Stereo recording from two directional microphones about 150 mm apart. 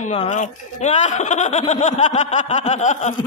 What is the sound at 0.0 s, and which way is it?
Speech, 50° left (ahead or behind).